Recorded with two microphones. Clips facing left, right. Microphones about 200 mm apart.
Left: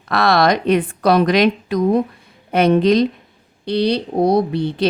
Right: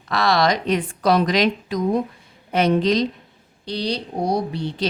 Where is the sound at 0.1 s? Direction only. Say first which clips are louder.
Left 4 dB; 55° left (ahead or behind).